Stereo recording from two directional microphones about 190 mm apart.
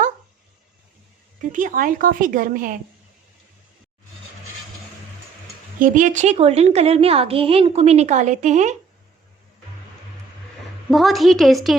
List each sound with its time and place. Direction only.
1.4 s a woman's voice: 45° right (ahead or behind)
5.8 s a woman's voice: 45° right (ahead or behind)
10.9 s a woman's voice: centre (ahead or behind)